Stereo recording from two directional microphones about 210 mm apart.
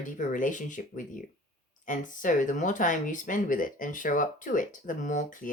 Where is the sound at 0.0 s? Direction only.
40° left (ahead or behind).